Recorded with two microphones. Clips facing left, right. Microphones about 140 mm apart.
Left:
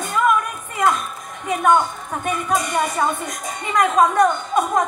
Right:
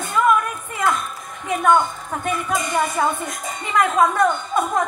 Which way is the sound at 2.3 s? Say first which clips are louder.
Left 2 dB; 20° left (ahead or behind).